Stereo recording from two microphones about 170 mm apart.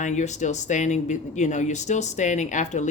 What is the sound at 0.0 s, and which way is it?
Speech, 45° left (ahead or behind).